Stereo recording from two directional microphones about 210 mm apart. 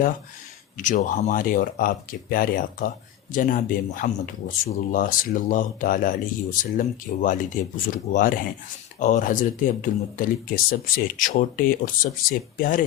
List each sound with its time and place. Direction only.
0.8 s speech: 40° left (ahead or behind)